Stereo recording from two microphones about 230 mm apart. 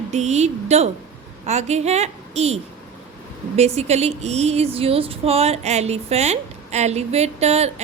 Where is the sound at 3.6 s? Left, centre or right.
Right.